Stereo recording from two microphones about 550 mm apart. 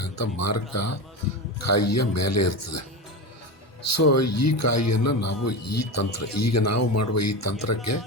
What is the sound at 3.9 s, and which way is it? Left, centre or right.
Speech, left.